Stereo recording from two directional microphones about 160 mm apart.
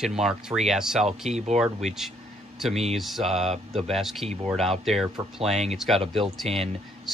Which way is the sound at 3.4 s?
40° right (ahead or behind).